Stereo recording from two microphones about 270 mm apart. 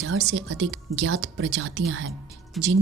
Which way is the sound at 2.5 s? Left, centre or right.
Centre.